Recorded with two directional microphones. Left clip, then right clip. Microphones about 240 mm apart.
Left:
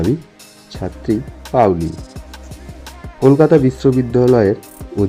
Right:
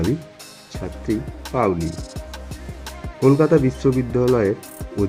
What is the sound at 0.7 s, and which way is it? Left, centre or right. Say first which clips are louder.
Speech: left 6 dB; centre.